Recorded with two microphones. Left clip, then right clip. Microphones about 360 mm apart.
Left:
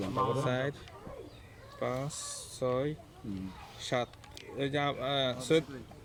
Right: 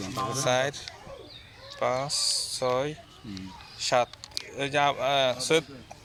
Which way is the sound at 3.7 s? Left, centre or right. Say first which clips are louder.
Right 9 dB; centre.